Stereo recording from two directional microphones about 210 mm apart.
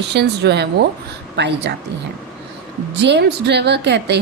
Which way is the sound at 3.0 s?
55° right (ahead or behind).